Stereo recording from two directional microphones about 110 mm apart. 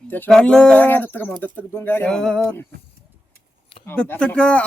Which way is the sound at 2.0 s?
5° left (ahead or behind).